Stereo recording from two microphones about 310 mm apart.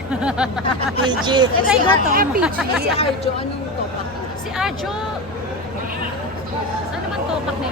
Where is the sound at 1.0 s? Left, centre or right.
Centre.